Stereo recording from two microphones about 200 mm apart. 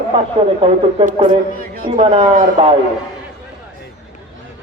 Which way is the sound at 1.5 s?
45° right (ahead or behind).